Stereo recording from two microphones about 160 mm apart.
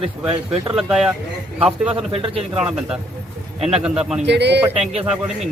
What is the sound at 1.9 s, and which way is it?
Speech, 35° right (ahead or behind).